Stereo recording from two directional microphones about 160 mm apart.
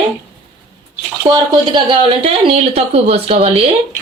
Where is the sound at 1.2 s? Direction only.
25° right (ahead or behind).